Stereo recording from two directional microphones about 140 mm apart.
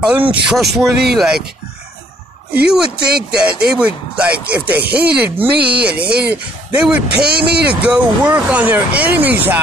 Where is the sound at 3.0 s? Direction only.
90° right.